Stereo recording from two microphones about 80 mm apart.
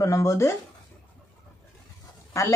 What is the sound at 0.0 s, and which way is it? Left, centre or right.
Speech, left.